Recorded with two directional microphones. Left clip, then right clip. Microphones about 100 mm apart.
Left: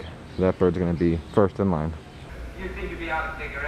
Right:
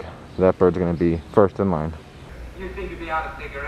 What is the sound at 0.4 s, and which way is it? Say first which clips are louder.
Speech: right 5 dB; 20° right (ahead or behind).